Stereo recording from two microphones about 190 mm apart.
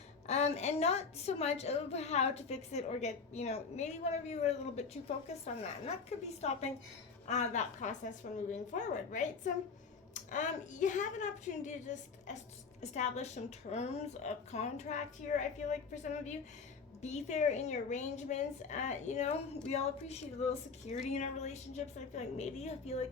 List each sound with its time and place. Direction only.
0.3 s a woman's voice: 35° left (ahead or behind)